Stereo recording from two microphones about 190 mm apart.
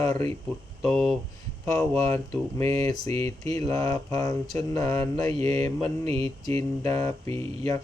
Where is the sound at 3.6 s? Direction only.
15° left (ahead or behind).